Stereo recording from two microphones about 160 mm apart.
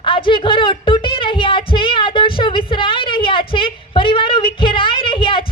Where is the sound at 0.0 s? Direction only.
30° left (ahead or behind).